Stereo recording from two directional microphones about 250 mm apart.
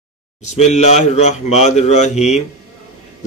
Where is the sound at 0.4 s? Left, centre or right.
Left.